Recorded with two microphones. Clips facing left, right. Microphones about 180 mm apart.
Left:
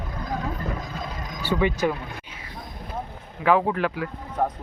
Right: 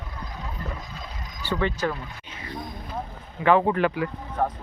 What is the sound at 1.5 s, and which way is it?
Speech, 10° left (ahead or behind).